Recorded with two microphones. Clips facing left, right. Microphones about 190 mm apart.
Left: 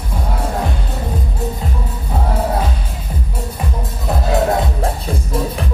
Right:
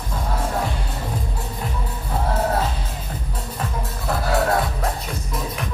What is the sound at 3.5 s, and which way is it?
Music, 20° left (ahead or behind).